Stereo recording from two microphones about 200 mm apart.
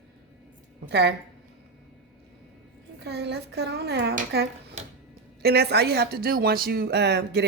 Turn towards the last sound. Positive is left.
turn(degrees=-55)  # may be behind; listen again after turning